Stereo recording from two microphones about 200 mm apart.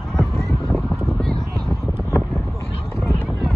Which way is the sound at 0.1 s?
Centre (ahead or behind).